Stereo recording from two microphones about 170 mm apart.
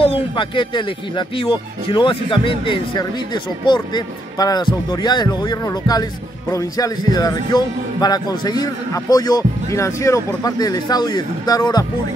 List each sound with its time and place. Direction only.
0.0 s a man's voice: 30° left (ahead or behind)